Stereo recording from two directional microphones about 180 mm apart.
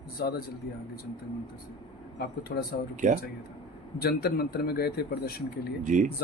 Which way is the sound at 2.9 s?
45° right (ahead or behind).